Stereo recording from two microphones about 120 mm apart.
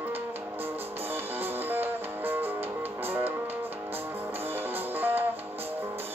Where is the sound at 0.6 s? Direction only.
20° right (ahead or behind).